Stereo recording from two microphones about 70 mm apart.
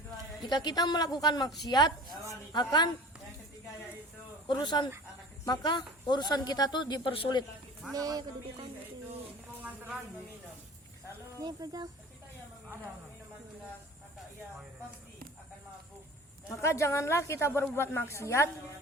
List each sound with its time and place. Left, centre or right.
0.4 s a woman's voice: left
2.5 s speech: left
4.4 s speech: left
7.9 s speech: right
9.6 s a sound: right
11.4 s speech: right
16.6 s a woman's voice: left